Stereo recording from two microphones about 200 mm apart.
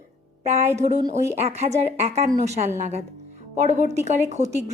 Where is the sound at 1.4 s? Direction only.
35° right (ahead or behind).